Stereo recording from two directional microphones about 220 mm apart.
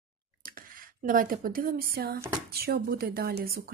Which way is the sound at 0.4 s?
40° right (ahead or behind).